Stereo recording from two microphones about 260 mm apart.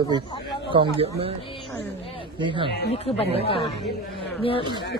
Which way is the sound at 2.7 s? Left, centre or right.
Left.